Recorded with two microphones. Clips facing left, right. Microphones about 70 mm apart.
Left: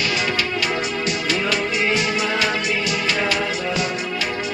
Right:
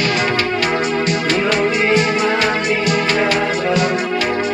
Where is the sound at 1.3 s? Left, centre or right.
Right.